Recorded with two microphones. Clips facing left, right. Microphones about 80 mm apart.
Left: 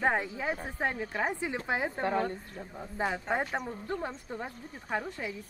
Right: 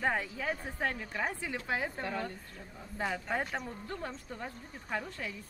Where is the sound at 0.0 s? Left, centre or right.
Left.